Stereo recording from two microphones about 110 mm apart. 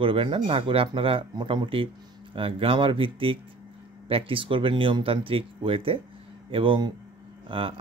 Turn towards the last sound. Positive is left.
turn(degrees=-55)  # may be behind; listen again after turning